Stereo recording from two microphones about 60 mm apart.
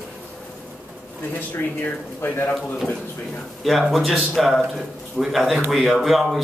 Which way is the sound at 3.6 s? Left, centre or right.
Centre.